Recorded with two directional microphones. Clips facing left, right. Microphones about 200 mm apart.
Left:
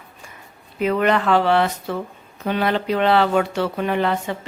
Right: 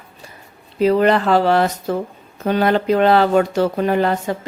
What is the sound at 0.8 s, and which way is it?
Speech, 35° right (ahead or behind).